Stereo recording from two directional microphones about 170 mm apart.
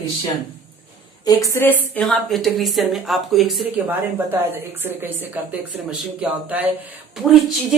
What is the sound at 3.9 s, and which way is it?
A woman's voice, 10° right (ahead or behind).